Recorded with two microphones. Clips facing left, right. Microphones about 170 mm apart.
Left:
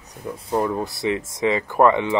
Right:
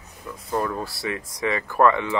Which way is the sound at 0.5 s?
20° left (ahead or behind).